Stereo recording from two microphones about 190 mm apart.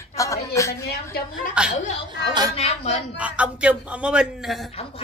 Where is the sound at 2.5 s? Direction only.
30° left (ahead or behind).